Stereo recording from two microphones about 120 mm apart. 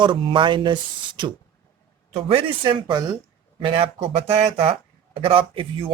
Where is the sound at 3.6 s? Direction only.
50° right (ahead or behind).